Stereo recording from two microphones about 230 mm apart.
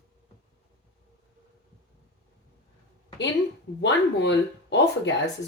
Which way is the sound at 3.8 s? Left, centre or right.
Left.